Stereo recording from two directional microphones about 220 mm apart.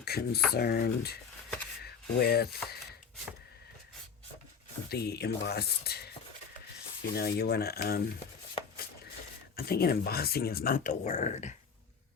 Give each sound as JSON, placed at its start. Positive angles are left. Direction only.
{"t": 0.0, "sound": "speech", "side_deg": 45}
{"t": 1.8, "sound": "rub", "side_deg": 45}
{"t": 4.9, "sound": "speech", "side_deg": 45}
{"t": 8.6, "sound": "chopping", "side_deg": 25}
{"t": 9.6, "sound": "speech", "side_deg": 45}